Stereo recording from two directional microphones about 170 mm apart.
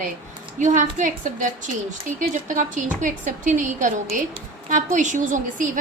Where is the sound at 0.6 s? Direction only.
45° right (ahead or behind).